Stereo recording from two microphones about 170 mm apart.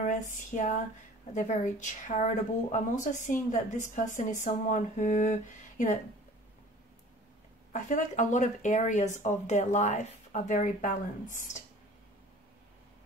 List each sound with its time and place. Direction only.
0.0 s speech: 45° left (ahead or behind)
7.7 s speech: 45° left (ahead or behind)